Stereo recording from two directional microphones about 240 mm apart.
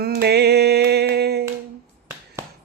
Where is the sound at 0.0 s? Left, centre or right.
Right.